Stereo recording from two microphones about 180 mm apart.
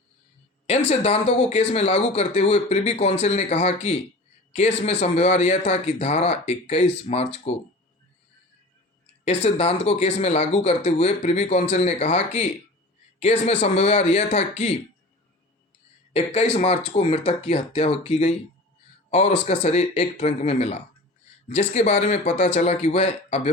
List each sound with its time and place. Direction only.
0.9 s speech: 35° left (ahead or behind)
9.2 s speech: 35° left (ahead or behind)
16.1 s speech: 35° left (ahead or behind)
19.5 s speech: 35° left (ahead or behind)